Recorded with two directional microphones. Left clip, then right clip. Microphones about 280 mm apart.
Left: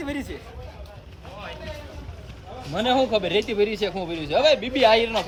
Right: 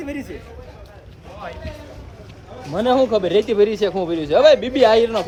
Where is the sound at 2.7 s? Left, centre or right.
Centre.